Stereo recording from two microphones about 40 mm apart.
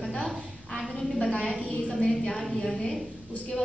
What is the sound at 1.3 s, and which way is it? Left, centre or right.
Speech, left.